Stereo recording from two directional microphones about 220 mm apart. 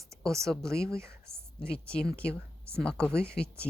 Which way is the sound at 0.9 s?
10° right (ahead or behind).